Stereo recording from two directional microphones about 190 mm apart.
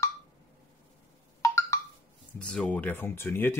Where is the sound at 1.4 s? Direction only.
15° left (ahead or behind).